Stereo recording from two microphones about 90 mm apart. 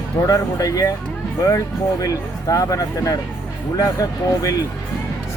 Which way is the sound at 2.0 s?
40° left (ahead or behind).